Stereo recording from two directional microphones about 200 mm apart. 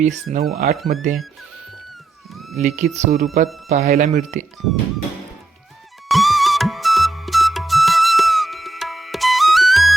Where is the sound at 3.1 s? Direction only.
45° right (ahead or behind).